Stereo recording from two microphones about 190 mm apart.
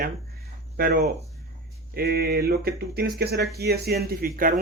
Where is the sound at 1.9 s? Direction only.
55° right (ahead or behind).